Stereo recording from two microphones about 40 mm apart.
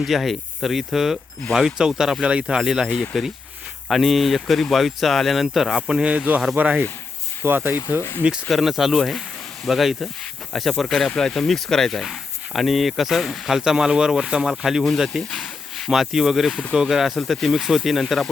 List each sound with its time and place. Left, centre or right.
0.0 s speech: centre
2.2 s speech: right
2.6 s speech: centre
5.9 s speech: right
6.6 s speech: right
7.4 s speech: right
8.4 s speech: centre
13.5 s speech: centre
15.3 s a sound: centre
15.9 s speech: centre